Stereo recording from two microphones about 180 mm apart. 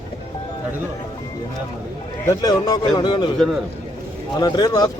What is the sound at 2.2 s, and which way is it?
Speech, 20° left (ahead or behind).